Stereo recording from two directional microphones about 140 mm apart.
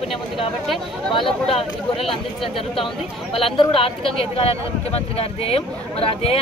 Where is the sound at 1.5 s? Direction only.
45° left (ahead or behind).